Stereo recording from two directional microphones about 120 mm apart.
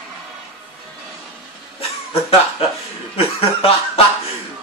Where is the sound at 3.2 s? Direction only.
55° left (ahead or behind).